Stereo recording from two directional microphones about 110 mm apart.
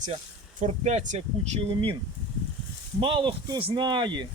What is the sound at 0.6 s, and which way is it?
Speech, 90° right.